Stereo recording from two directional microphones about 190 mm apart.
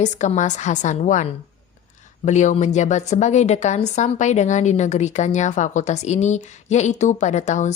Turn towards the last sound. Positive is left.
turn(degrees=40)  # may be behind; listen again after turning